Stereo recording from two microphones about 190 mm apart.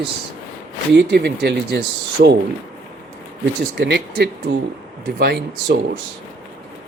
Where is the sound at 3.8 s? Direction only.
60° right (ahead or behind).